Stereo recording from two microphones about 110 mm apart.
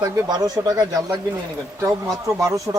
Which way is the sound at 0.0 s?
35° right (ahead or behind).